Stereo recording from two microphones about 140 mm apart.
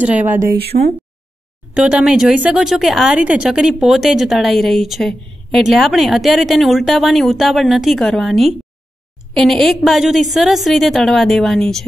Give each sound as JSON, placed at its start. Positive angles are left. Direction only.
{"t": 0.0, "sound": "speech", "side_deg": -10}
{"t": 0.7, "sound": "speech", "side_deg": -65}
{"t": 1.7, "sound": "speech", "side_deg": -5}